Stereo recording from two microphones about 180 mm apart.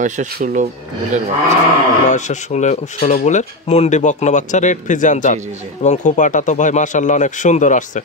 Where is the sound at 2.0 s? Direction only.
40° left (ahead or behind).